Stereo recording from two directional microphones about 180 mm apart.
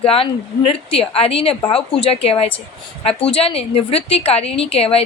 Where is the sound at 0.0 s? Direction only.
30° left (ahead or behind).